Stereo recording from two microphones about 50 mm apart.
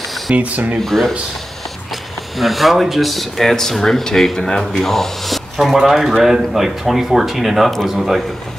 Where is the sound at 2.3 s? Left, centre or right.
Centre.